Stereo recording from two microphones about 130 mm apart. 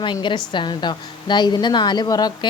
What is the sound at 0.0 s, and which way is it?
A woman's voice, 35° left (ahead or behind).